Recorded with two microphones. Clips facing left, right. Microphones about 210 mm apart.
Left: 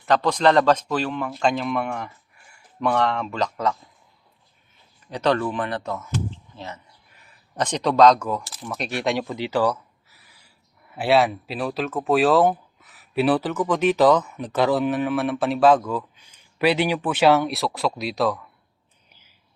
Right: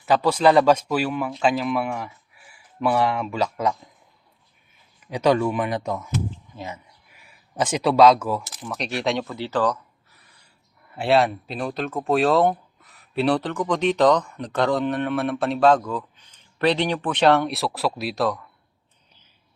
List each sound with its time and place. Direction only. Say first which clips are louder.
0.0 s speech: right 1 dB; 5° right (ahead or behind)
5.1 s speech: right 2 dB; 10° right (ahead or behind)
9.2 s a sound: left 1 dB; 15° left (ahead or behind)
10.9 s speech: even; centre (ahead or behind)